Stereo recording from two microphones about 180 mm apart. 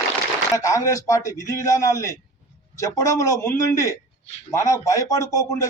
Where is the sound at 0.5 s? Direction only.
15° left (ahead or behind).